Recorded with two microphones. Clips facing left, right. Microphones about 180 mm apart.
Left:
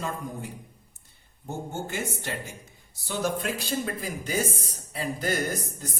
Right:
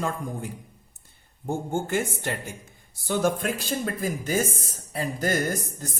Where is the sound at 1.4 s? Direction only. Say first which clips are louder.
Right 6 dB; 50° right (ahead or behind).